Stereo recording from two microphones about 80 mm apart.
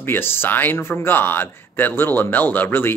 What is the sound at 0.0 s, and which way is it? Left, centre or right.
Speech, left.